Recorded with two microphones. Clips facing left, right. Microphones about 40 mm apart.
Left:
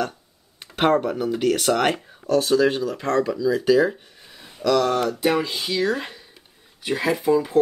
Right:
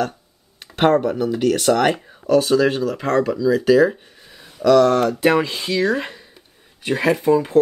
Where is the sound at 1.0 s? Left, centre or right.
Centre.